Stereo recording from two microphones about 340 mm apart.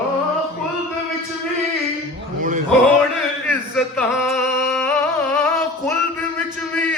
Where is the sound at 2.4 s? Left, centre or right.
Right.